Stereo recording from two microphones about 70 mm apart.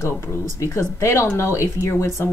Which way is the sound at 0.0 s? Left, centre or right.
Left.